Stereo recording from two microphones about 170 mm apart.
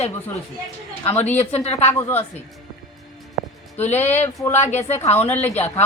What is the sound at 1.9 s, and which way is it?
Speech, 15° left (ahead or behind).